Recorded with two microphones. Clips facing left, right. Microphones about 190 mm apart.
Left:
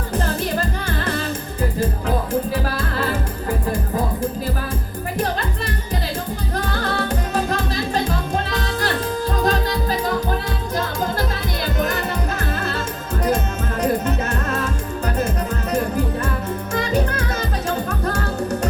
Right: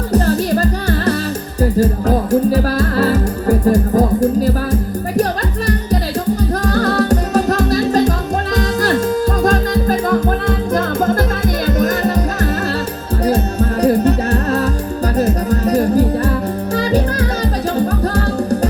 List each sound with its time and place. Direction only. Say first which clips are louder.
0.1 s music: right 9 dB; 40° right (ahead or behind)
6.7 s music: right 10 dB; 40° right (ahead or behind)